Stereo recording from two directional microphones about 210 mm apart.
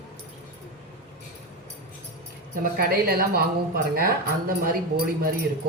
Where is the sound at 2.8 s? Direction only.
45° right (ahead or behind).